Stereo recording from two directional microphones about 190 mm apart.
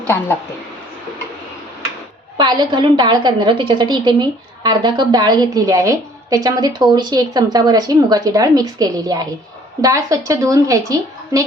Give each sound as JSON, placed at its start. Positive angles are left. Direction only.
{"t": 2.4, "sound": "a woman's voice", "side_deg": -20}